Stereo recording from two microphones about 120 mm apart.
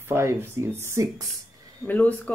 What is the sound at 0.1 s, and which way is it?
Speech, 20° right (ahead or behind).